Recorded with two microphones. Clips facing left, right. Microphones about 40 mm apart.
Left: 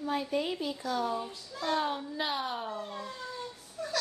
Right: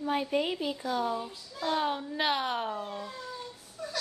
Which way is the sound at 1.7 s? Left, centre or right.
Centre.